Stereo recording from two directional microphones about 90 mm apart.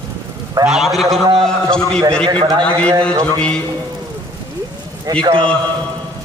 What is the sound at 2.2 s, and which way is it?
Speech, 70° right (ahead or behind).